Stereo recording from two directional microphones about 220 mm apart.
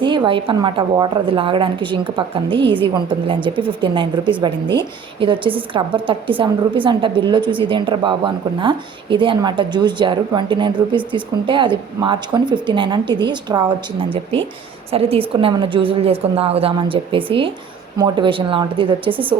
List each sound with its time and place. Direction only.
0.0 s speech: 20° right (ahead or behind)